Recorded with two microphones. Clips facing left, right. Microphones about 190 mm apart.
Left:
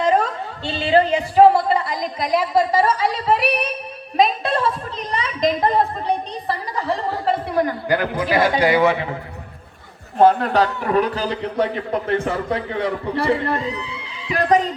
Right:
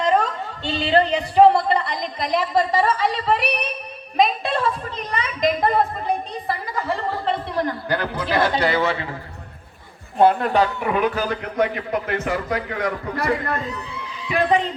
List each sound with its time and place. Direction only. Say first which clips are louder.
0.0 s a woman's voice: left 1 dB; 5° left (ahead or behind)
7.4 s a man's voice: left 4 dB; 10° left (ahead or behind)
10.2 s a man's voice: left 2 dB; 40° left (ahead or behind)